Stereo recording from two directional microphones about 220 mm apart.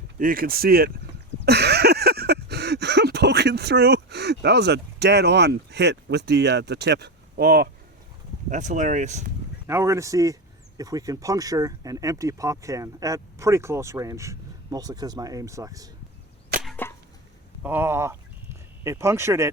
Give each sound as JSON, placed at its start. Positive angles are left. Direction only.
{"t": 0.2, "sound": "speech", "side_deg": -40}
{"t": 1.5, "sound": "a sound", "side_deg": -45}
{"t": 8.4, "sound": "speech", "side_deg": -35}
{"t": 9.6, "sound": "speech", "side_deg": -10}
{"t": 16.5, "sound": "wood", "side_deg": -45}
{"t": 17.6, "sound": "speech", "side_deg": -10}